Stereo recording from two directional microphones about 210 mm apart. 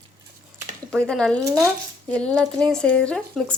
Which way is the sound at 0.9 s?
5° left (ahead or behind).